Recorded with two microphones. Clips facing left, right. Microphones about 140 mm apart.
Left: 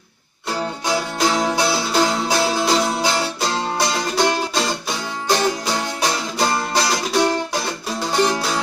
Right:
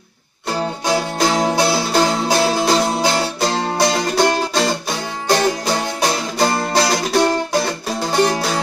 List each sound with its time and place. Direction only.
0.5 s music: 50° right (ahead or behind)
3.3 s music: 55° right (ahead or behind)